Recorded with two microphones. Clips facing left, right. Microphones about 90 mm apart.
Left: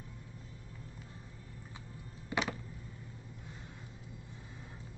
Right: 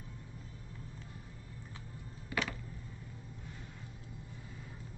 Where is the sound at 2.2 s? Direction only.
20° left (ahead or behind).